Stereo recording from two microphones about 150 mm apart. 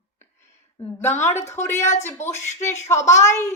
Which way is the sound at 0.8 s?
15° left (ahead or behind).